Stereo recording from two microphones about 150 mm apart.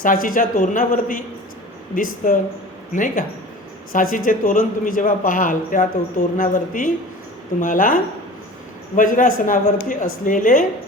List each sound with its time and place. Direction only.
0.0 s a man's voice: 65° left (ahead or behind)
9.0 s a man's voice: 65° left (ahead or behind)